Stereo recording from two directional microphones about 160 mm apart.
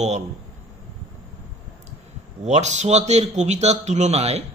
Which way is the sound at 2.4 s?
45° right (ahead or behind).